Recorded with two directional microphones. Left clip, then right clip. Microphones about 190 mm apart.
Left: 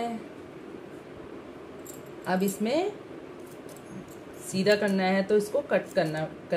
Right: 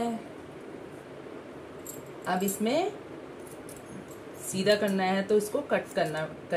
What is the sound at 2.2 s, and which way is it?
Speech, 35° left (ahead or behind).